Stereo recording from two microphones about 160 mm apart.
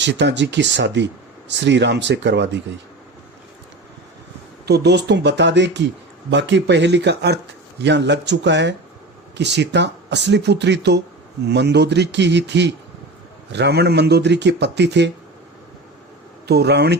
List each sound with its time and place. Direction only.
0.0 s speech: 90° right
4.6 s speech: 90° right
16.5 s speech: 90° right